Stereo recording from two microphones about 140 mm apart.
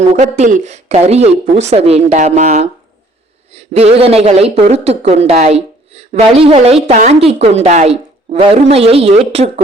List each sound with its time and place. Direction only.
0.1 s a woman's voice: 55° right (ahead or behind)
6.8 s a woman's voice: 60° right (ahead or behind)
7.2 s a woman's voice: 45° right (ahead or behind)